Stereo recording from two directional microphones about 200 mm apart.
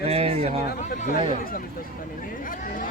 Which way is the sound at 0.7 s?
40° left (ahead or behind).